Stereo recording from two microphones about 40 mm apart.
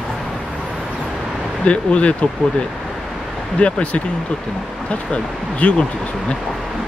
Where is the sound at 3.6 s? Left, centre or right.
Left.